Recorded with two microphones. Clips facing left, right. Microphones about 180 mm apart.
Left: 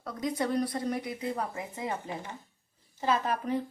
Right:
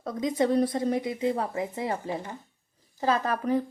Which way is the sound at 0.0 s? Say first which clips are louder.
Right 5 dB; 20° right (ahead or behind).